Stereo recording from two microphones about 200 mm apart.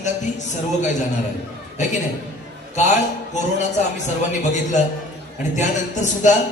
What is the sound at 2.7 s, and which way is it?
Speech, 35° left (ahead or behind).